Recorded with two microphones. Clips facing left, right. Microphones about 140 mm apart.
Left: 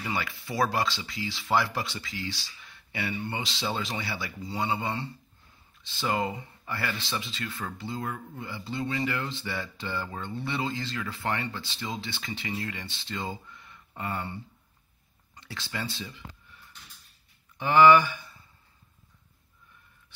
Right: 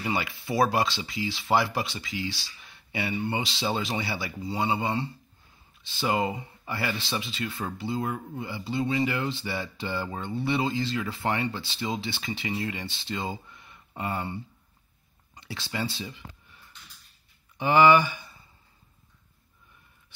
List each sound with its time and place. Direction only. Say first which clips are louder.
0.0 s speech: right 3 dB; 15° right (ahead or behind)
17.6 s speech: even; 15° right (ahead or behind)